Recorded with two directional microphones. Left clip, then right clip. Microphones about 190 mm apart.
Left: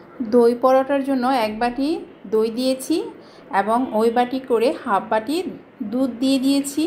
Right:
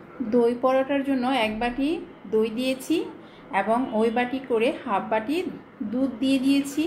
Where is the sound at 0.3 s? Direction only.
30° left (ahead or behind).